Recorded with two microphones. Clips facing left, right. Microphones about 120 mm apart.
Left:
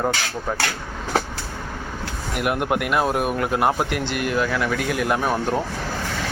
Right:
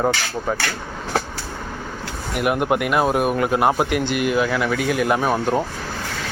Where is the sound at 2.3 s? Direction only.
Centre (ahead or behind).